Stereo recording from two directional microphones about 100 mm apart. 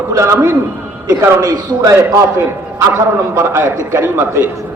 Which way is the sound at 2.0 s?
30° right (ahead or behind).